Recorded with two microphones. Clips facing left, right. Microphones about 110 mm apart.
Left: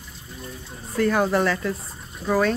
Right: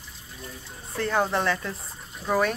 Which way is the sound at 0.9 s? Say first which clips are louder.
Left 5 dB; 20° right (ahead or behind).